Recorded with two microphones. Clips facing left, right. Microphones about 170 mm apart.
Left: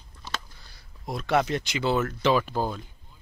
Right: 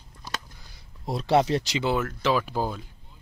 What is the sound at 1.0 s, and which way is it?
Speech, 30° right (ahead or behind).